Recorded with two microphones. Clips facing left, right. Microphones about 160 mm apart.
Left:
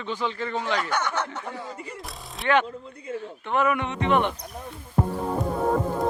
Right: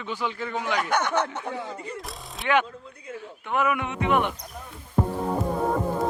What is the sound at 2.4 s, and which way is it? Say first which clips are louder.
Speech: left 1 dB; 10° right (ahead or behind).